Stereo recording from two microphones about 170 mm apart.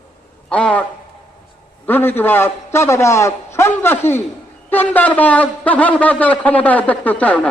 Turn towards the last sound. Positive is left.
turn(degrees=10)  # may be behind; listen again after turning